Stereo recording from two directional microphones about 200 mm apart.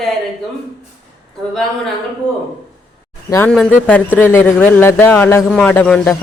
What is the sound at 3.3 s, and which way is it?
Speech, 15° left (ahead or behind).